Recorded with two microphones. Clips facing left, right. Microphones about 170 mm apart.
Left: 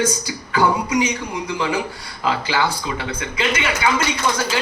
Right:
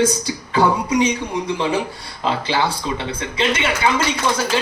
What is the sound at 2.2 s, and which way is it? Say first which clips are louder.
Speech: right 1 dB; 25° right (ahead or behind).